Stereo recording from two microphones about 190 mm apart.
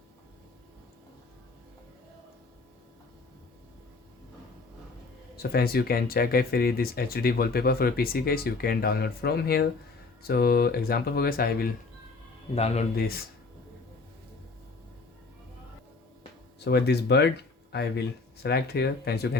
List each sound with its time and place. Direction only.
5.4 s speech: 55° left (ahead or behind)
12.5 s speech: 35° left (ahead or behind)
13.0 s speech: 55° left (ahead or behind)
16.6 s speech: 60° left (ahead or behind)